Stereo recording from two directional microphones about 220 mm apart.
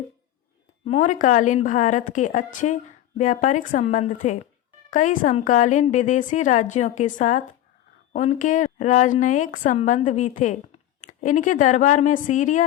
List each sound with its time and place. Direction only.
0.9 s a woman's voice: 35° left (ahead or behind)